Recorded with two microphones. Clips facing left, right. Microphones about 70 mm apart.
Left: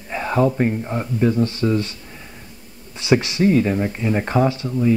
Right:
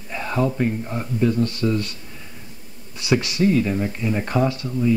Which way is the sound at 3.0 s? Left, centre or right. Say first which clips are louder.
Left 3 dB; left.